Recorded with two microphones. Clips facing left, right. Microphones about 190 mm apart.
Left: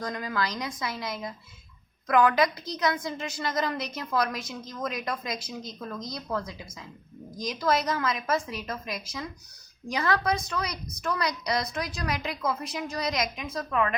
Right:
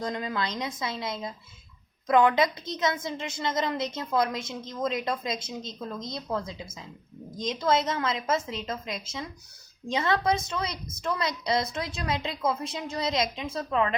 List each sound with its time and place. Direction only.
0.0 s a woman's voice: 25° right (ahead or behind)